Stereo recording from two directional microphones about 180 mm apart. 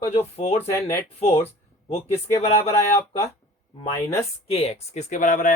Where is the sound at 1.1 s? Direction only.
35° left (ahead or behind).